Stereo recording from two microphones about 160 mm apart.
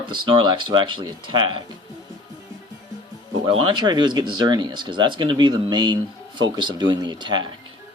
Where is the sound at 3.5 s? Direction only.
30° right (ahead or behind).